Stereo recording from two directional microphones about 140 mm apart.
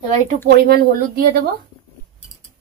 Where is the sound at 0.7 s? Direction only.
90° right.